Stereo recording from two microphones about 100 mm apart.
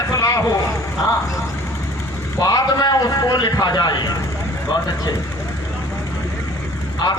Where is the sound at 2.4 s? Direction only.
40° left (ahead or behind).